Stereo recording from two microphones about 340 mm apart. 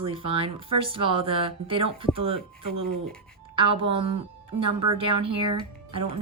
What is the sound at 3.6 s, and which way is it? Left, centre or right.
Speech, centre.